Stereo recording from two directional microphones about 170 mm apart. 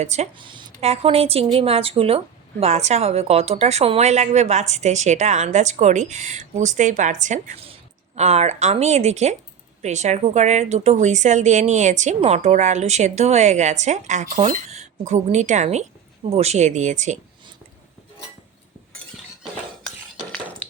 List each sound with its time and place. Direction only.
0.0 s a woman's voice: 40° right (ahead or behind)
0.3 s a woman's voice: 30° right (ahead or behind); by 17.2 s 45° right (ahead or behind)
19.4 s a sound: 5° right (ahead or behind)